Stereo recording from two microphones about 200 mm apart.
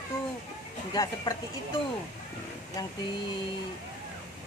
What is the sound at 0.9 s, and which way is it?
Speech, 20° left (ahead or behind).